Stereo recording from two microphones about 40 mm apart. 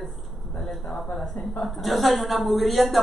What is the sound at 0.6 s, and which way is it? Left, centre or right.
A man's voice, centre.